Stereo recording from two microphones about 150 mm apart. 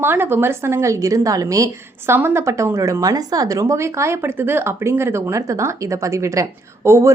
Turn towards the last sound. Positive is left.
turn(degrees=-20)  # may be behind; listen again after turning